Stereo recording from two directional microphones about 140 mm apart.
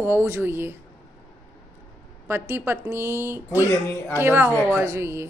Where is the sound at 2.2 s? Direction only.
15° right (ahead or behind).